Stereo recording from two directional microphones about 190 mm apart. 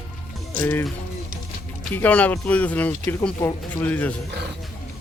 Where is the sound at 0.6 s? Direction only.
10° left (ahead or behind).